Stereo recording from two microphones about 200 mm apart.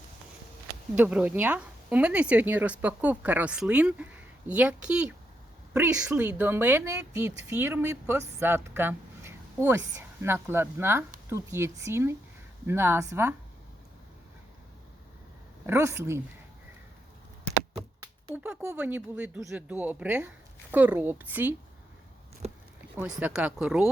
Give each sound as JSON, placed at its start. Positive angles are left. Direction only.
{"t": 0.9, "sound": "a woman's voice", "side_deg": -5}
{"t": 15.6, "sound": "a woman's voice", "side_deg": -15}
{"t": 18.3, "sound": "a woman's voice", "side_deg": -5}
{"t": 22.4, "sound": "a sound", "side_deg": -35}
{"t": 23.0, "sound": "speech", "side_deg": -5}